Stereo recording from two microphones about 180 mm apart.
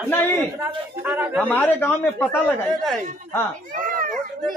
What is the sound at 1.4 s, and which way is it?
Speech, 10° left (ahead or behind).